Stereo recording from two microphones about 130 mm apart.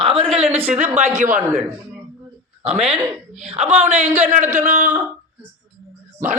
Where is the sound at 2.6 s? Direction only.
55° right (ahead or behind).